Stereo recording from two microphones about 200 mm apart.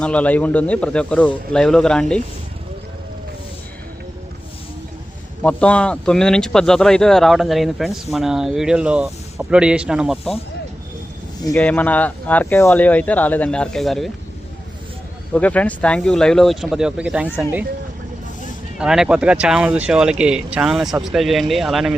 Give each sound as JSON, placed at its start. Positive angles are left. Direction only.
{"t": 0.0, "sound": "speech", "side_deg": 5}
{"t": 5.4, "sound": "speech", "side_deg": 5}
{"t": 11.5, "sound": "speech", "side_deg": 5}
{"t": 15.3, "sound": "speech", "side_deg": 5}
{"t": 18.8, "sound": "speech", "side_deg": -5}